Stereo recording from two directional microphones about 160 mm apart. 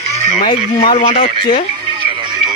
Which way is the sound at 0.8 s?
40° left (ahead or behind).